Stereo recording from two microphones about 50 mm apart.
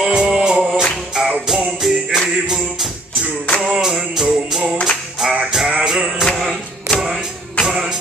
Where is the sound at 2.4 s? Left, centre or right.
Centre.